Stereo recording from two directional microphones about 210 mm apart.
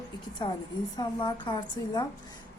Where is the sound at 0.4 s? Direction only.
20° left (ahead or behind).